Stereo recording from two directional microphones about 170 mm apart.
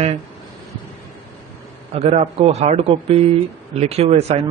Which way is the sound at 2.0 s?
35° right (ahead or behind).